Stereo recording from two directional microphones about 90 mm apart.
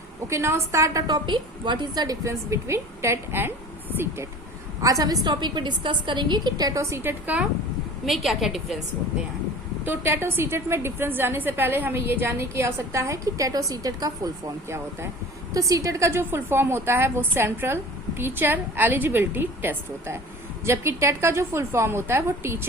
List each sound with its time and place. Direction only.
0.3 s a woman's voice: 30° right (ahead or behind)
1.0 s a woman's voice: 55° right (ahead or behind)
2.2 s a woman's voice: 30° right (ahead or behind)
4.8 s a woman's voice: 40° right (ahead or behind)
5.2 s a woman's voice: 55° right (ahead or behind)
6.9 s a woman's voice: 25° right (ahead or behind)
8.0 s a woman's voice: centre (ahead or behind)
9.8 s a woman's voice: 25° right (ahead or behind); by 14.5 s 40° right (ahead or behind)
15.5 s a woman's voice: 40° right (ahead or behind)